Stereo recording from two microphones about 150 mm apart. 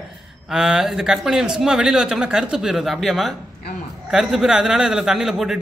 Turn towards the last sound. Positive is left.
turn(degrees=-5)  # may be behind; listen again after turning